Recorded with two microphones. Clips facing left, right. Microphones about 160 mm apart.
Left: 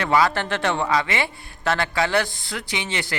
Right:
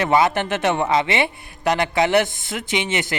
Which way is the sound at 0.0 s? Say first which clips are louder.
Right 2 dB; 20° right (ahead or behind).